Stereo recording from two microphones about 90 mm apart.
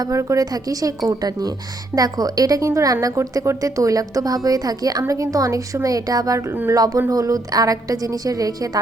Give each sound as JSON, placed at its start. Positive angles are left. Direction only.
{"t": 0.0, "sound": "a woman's voice", "side_deg": -35}